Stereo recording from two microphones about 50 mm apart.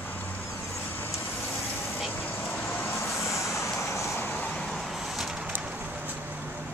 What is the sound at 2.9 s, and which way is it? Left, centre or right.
Vehicle, left.